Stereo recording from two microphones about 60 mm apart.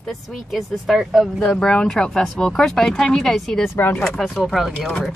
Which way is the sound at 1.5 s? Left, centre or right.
Centre.